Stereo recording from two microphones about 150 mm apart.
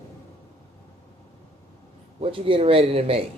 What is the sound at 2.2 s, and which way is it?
Speech, 35° right (ahead or behind).